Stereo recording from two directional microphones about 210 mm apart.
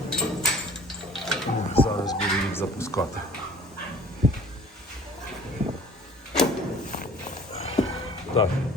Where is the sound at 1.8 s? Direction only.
20° left (ahead or behind).